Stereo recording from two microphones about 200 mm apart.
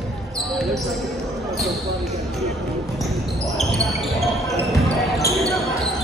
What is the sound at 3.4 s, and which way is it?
Speech, centre (ahead or behind).